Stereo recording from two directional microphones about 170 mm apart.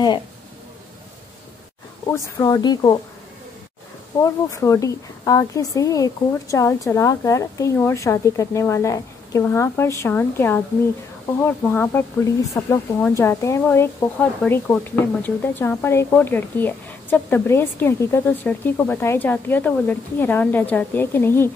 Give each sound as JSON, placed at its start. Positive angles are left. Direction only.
{"t": 2.0, "sound": "speech", "side_deg": 20}
{"t": 4.2, "sound": "speech", "side_deg": 20}